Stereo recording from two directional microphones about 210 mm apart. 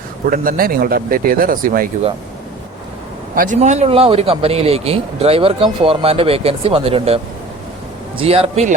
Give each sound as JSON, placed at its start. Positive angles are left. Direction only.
{"t": 0.3, "sound": "speech", "side_deg": -45}
{"t": 3.3, "sound": "a man's voice", "side_deg": -40}
{"t": 8.2, "sound": "a man's voice", "side_deg": -25}